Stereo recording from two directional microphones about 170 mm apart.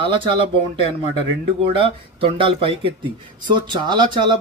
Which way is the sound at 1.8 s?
30° right (ahead or behind).